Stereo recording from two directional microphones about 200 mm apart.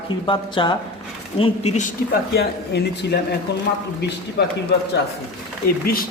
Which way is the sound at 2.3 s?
60° left (ahead or behind).